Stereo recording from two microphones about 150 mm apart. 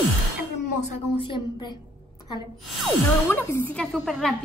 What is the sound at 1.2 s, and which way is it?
Speech, 30° left (ahead or behind).